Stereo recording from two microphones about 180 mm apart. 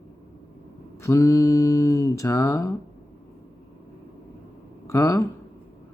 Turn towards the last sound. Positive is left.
turn(degrees=15)  # may be behind; listen again after turning